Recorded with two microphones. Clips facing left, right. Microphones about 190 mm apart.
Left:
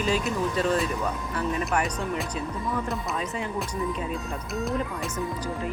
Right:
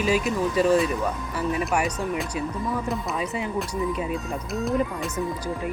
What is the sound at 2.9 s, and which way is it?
Speech, 10° right (ahead or behind).